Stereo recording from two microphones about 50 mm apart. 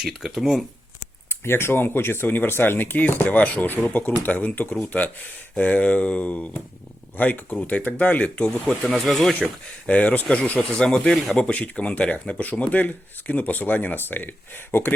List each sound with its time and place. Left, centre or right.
0.0 s speech: centre
1.5 s speech: left
9.0 s speech: centre
9.8 s speech: left
11.1 s speech: centre
11.5 s speech: left